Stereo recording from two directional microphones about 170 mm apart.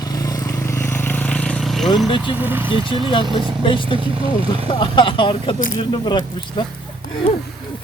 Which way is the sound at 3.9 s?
30° right (ahead or behind).